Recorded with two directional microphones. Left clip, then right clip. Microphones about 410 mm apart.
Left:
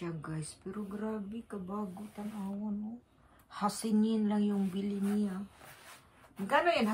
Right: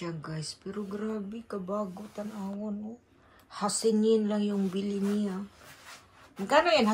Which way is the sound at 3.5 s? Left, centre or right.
Centre.